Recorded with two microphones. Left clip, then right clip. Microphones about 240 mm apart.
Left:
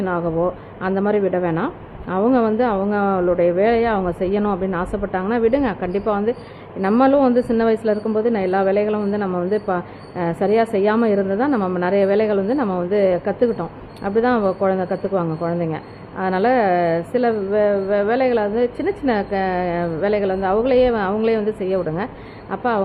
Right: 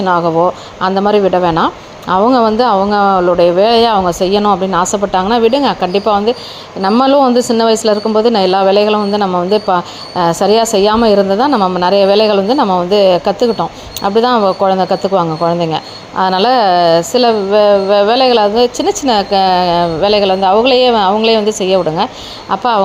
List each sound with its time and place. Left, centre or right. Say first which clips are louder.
0.0 s a woman's voice: right 10 dB; centre